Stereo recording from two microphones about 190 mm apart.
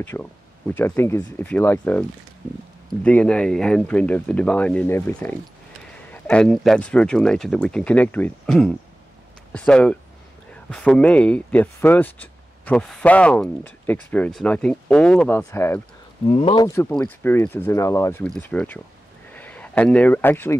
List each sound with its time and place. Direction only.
0.0 s speech: 10° left (ahead or behind)
16.3 s speech: 30° left (ahead or behind); by 20.5 s 10° left (ahead or behind)